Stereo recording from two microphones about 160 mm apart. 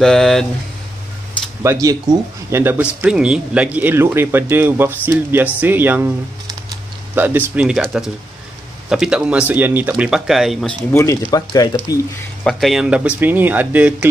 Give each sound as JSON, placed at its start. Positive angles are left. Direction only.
{"t": 0.0, "sound": "speech", "side_deg": 5}
{"t": 1.6, "sound": "speech", "side_deg": -20}
{"t": 7.2, "sound": "speech", "side_deg": -10}
{"t": 10.9, "sound": "speech", "side_deg": 15}
{"t": 12.4, "sound": "speech", "side_deg": 0}